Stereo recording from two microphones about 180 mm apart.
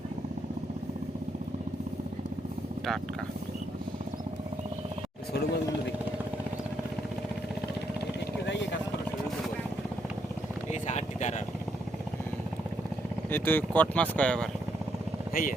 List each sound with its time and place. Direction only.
10.7 s a sound: 40° left (ahead or behind)
13.3 s speech: 10° left (ahead or behind)
15.3 s speech: 50° left (ahead or behind)